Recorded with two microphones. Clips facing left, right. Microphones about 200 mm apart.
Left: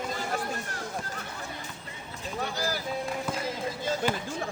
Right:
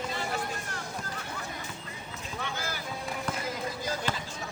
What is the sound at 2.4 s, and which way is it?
Vehicle, 35° left (ahead or behind).